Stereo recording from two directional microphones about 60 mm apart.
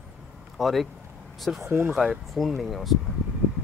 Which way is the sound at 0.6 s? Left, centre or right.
Centre.